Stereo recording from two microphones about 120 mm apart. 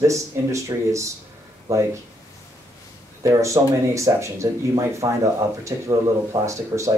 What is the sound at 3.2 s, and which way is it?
Speech, 25° right (ahead or behind).